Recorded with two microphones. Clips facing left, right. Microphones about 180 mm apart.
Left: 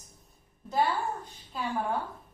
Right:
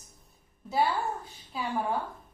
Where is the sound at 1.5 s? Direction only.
5° right (ahead or behind).